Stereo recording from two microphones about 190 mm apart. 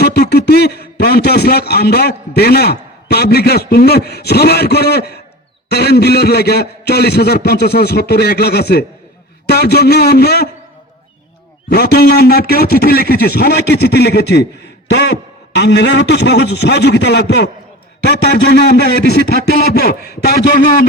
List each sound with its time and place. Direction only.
0.0 s a man's voice: 60° left (ahead or behind)
11.7 s a man's voice: 55° left (ahead or behind)